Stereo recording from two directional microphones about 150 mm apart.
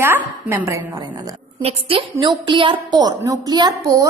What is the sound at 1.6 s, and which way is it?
A woman's voice, 40° right (ahead or behind).